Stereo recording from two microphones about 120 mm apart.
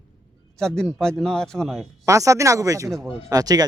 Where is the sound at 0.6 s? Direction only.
5° left (ahead or behind).